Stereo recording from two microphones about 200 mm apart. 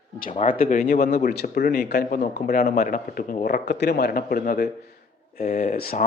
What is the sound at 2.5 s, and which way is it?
Speech, 45° left (ahead or behind).